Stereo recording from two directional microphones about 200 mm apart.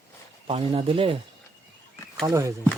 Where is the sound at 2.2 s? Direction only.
15° right (ahead or behind).